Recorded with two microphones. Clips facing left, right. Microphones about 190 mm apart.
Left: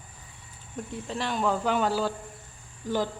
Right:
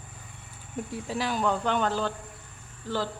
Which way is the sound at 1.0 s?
Centre (ahead or behind).